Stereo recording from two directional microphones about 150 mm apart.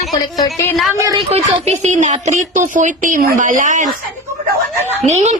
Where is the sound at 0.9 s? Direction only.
25° right (ahead or behind).